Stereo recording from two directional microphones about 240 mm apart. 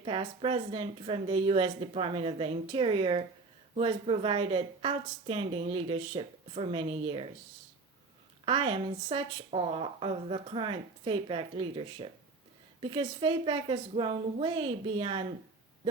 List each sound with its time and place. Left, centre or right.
0.0 s a woman's voice: right
8.4 s a woman's voice: right